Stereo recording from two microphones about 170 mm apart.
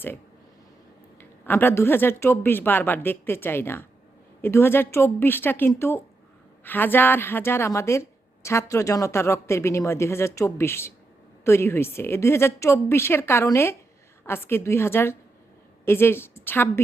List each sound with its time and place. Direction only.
1.2 s speech: 10° left (ahead or behind)